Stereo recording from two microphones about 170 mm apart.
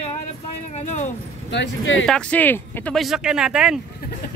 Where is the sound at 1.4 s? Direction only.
90° left.